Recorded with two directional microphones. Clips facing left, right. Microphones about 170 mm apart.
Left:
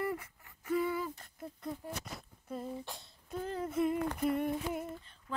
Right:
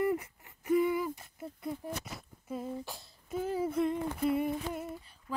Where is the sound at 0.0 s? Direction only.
20° right (ahead or behind).